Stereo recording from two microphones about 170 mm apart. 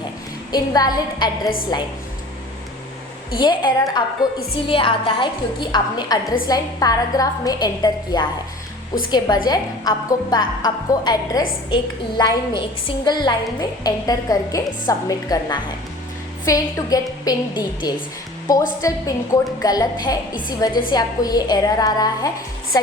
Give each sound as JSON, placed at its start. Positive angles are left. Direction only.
{"t": 0.5, "sound": "a woman's voice", "side_deg": 20}
{"t": 3.3, "sound": "a woman's voice", "side_deg": 25}